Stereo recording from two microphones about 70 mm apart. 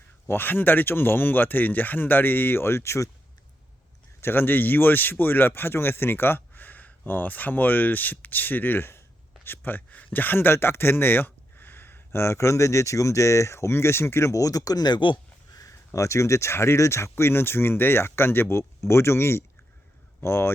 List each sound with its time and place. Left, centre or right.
0.3 s speech: left
4.2 s speech: left
15.6 s speech: left